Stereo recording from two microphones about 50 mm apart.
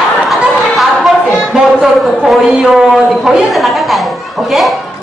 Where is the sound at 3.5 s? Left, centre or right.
Centre.